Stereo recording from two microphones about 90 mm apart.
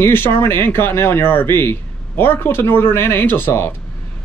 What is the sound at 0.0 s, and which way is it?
Speech, 25° left (ahead or behind).